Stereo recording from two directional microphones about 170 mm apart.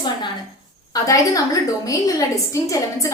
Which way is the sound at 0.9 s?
20° left (ahead or behind).